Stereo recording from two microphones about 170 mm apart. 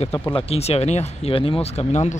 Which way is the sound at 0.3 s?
35° left (ahead or behind).